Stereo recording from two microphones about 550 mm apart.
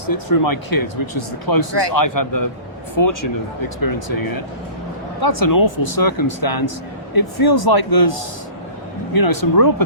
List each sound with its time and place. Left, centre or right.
0.0 s speech: left
3.0 s speech: left
3.8 s speech: left